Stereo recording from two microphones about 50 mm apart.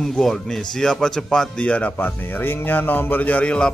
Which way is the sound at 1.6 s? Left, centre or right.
Left.